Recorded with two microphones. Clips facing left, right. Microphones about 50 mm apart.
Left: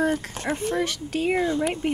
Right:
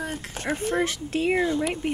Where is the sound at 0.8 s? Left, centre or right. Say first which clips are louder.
Even; right.